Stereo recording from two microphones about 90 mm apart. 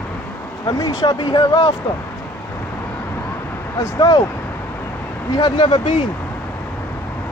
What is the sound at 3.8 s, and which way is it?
Speech, 40° left (ahead or behind).